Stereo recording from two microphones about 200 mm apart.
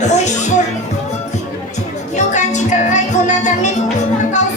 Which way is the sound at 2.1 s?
35° left (ahead or behind).